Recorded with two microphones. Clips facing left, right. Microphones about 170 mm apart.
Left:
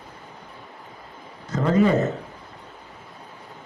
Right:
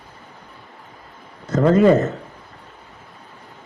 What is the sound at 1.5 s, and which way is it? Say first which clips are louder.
Speech: right 5 dB; 50° right (ahead or behind).